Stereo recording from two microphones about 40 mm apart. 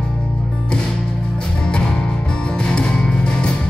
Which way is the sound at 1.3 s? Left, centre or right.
Left.